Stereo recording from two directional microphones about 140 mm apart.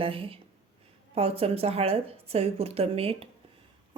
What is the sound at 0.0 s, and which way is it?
A woman's voice, 40° right (ahead or behind).